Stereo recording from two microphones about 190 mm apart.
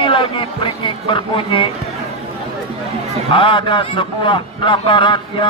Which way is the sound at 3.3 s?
25° left (ahead or behind).